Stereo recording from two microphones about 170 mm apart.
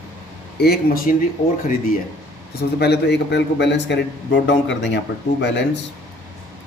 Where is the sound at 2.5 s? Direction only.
75° left (ahead or behind).